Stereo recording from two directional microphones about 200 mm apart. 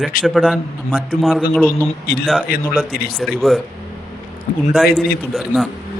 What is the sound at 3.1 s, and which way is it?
Speech, centre (ahead or behind).